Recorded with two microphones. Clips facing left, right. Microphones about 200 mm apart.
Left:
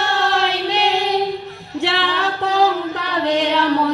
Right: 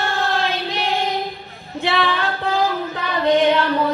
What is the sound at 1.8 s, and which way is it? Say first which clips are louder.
Singing: right 1 dB; 75° left (ahead or behind).